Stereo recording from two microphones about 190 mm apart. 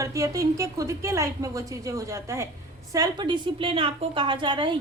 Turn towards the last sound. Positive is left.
turn(degrees=-25)  # may be behind; listen again after turning